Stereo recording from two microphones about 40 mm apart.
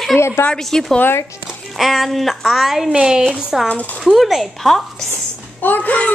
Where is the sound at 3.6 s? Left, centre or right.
Left.